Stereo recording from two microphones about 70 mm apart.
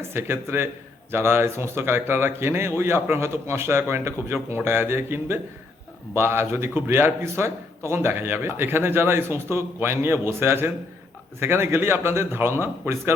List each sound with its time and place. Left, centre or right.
0.0 s a man's voice: right